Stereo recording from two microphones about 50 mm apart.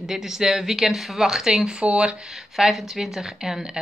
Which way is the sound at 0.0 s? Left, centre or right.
Centre.